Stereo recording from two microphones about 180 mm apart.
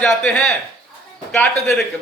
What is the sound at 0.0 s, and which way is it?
A man's voice, 5° left (ahead or behind).